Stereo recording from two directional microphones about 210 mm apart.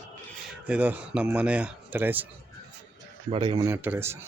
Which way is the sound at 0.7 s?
5° right (ahead or behind).